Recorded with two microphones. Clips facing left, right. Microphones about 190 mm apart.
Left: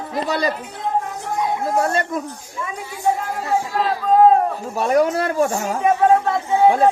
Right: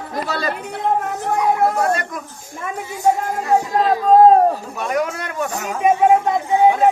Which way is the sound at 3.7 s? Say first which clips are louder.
Right 5 dB; 40° right (ahead or behind).